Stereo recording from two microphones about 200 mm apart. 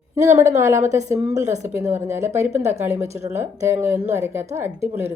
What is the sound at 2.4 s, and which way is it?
Speech, 35° right (ahead or behind).